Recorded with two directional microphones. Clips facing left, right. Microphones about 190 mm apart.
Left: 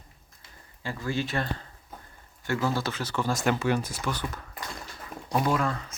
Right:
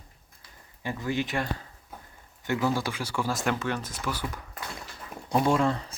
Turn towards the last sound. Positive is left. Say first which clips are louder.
# right 3 dB
turn(degrees=-30)  # may be behind; listen again after turning